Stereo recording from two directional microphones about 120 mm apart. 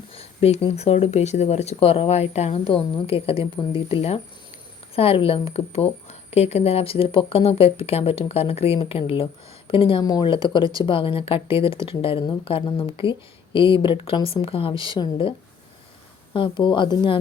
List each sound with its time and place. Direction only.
0.1 s a woman's voice: 55° left (ahead or behind)
10.0 s a woman's voice: 35° left (ahead or behind)
16.3 s a woman's voice: 40° left (ahead or behind)